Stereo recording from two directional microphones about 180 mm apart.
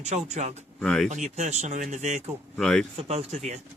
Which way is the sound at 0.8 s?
5° left (ahead or behind).